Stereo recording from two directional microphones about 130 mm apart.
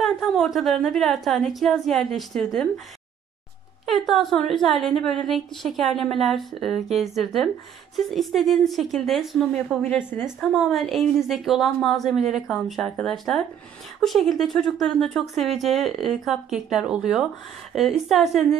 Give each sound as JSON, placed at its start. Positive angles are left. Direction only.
{"t": 0.0, "sound": "speech", "side_deg": 0}
{"t": 3.8, "sound": "speech", "side_deg": 0}
{"t": 9.9, "sound": "a woman's voice", "side_deg": 15}
{"t": 10.5, "sound": "speech", "side_deg": 0}